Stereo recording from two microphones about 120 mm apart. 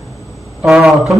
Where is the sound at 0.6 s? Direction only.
Centre (ahead or behind).